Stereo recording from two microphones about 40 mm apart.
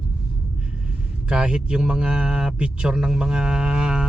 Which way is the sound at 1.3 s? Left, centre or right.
Right.